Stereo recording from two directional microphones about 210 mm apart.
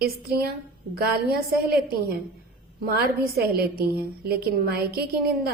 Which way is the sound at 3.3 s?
45° right (ahead or behind).